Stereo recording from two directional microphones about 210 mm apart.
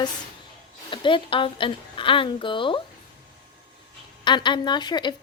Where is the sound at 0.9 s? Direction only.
25° left (ahead or behind).